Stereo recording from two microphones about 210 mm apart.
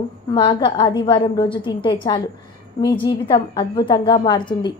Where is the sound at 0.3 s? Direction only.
25° left (ahead or behind).